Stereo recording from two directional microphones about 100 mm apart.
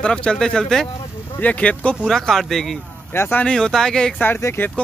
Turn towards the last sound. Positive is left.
turn(degrees=20)  # may be behind; listen again after turning